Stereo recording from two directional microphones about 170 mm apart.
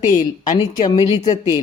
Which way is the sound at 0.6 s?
25° left (ahead or behind).